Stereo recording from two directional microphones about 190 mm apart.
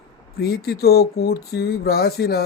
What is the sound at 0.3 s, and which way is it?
Speech, 55° left (ahead or behind).